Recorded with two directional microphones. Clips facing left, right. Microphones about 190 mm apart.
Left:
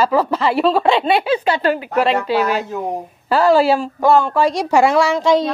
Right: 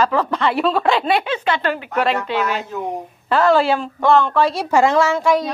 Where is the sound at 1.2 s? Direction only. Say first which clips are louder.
Left 4 dB; 35° left (ahead or behind).